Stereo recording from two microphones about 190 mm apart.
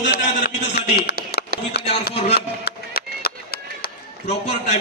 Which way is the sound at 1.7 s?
60° left (ahead or behind).